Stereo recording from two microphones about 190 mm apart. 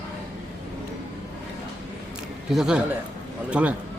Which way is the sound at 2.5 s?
5° right (ahead or behind).